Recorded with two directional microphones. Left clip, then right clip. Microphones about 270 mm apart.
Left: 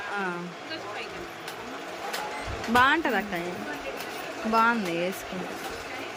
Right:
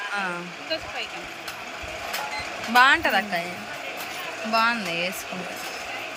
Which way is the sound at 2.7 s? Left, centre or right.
Centre.